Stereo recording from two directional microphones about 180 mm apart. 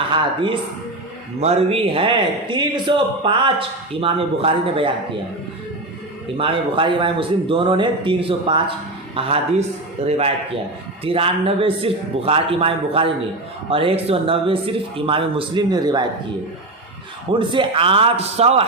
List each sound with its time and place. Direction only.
1.4 s a man's voice: 35° right (ahead or behind)
6.3 s a man's voice: 30° right (ahead or behind)
17.4 s speech: 25° right (ahead or behind)